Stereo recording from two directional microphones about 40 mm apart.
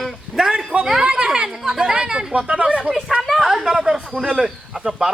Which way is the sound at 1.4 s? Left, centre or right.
Centre.